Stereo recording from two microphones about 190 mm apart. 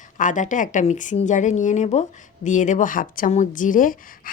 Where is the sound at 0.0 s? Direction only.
40° left (ahead or behind).